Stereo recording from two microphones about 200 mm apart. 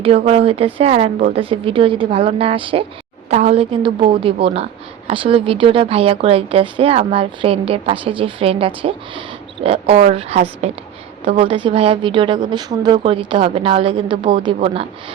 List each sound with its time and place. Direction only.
0.0 s speech: 30° right (ahead or behind)